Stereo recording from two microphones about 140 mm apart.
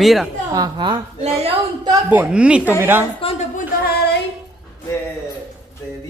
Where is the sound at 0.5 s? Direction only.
30° right (ahead or behind).